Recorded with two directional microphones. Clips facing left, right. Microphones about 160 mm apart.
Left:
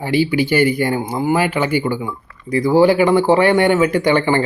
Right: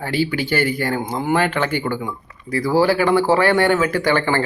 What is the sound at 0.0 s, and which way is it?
Speech, 10° left (ahead or behind).